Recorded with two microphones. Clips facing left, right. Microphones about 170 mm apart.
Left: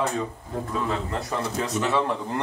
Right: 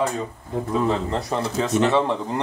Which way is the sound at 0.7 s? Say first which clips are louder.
Right 6 dB; 20° right (ahead or behind).